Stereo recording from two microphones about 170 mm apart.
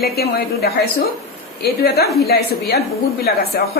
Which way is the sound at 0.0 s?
65° left (ahead or behind).